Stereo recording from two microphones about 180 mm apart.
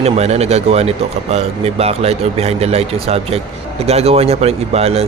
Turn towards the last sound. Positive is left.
turn(degrees=-35)  # may be behind; listen again after turning